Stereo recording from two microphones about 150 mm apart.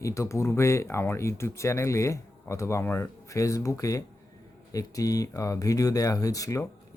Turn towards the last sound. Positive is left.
turn(degrees=20)  # may be behind; listen again after turning